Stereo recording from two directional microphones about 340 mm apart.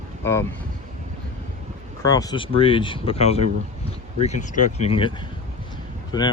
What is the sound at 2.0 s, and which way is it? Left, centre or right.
Speech, centre.